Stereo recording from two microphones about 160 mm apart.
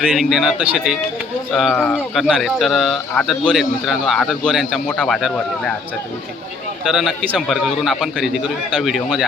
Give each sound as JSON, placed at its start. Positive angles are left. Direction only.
{"t": 0.1, "sound": "speech", "side_deg": 0}
{"t": 6.8, "sound": "speech", "side_deg": 0}